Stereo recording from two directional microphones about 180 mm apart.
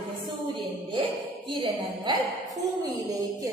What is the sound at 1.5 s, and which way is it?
Speech, 25° right (ahead or behind).